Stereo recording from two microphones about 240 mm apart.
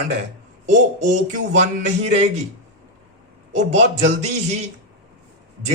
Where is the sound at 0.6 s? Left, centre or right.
Right.